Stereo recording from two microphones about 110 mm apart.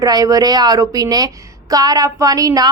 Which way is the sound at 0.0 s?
35° right (ahead or behind).